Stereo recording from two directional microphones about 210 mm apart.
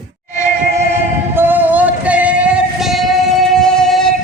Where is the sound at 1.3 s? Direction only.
10° right (ahead or behind).